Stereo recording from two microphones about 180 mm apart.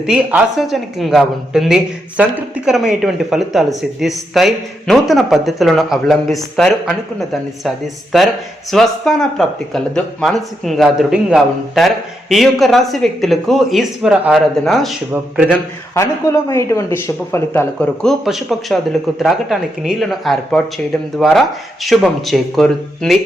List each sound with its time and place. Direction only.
0.0 s speech: 5° right (ahead or behind)
8.7 s speech: centre (ahead or behind)
16.0 s a man's voice: 15° left (ahead or behind)
18.0 s speech: centre (ahead or behind)